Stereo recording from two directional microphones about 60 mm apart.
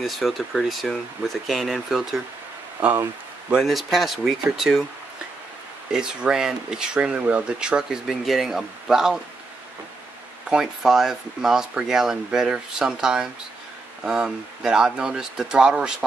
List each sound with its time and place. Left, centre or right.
0.0 s speech: centre
2.8 s speech: right
3.5 s speech: centre
5.9 s speech: centre
8.1 s speech: centre
10.5 s speech: centre